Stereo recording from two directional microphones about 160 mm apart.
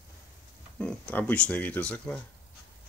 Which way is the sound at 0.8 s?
10° left (ahead or behind).